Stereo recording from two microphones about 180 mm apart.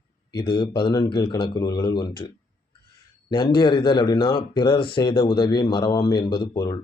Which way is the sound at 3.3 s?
25° left (ahead or behind).